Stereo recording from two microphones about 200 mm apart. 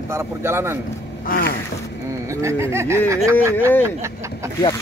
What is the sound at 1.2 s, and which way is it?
Speech, 45° left (ahead or behind).